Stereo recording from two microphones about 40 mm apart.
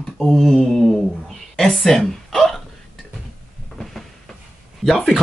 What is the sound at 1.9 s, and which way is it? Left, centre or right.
Speech, centre.